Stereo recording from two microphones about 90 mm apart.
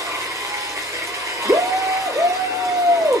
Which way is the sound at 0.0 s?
35° right (ahead or behind).